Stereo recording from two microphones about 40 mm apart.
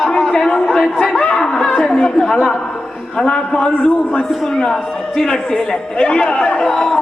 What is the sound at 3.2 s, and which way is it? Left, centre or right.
A man's voice, left.